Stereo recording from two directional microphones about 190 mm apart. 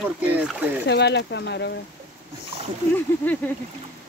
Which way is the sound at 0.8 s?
65° left (ahead or behind).